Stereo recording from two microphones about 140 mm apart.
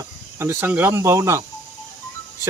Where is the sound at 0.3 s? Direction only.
15° right (ahead or behind).